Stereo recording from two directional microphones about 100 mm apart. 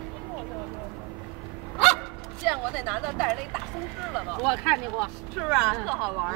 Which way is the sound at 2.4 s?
5° right (ahead or behind).